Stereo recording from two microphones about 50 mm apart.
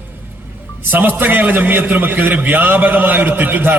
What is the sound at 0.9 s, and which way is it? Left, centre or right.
A man's voice, right.